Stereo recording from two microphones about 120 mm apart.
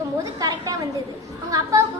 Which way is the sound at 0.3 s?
30° right (ahead or behind).